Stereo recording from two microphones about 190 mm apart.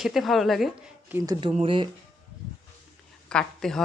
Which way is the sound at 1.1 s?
20° right (ahead or behind).